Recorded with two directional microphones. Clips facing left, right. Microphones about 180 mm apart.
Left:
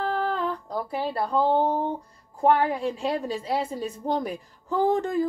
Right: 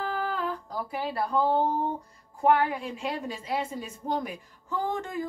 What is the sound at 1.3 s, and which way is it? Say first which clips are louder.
A woman's voice: left 3 dB; 30° left (ahead or behind).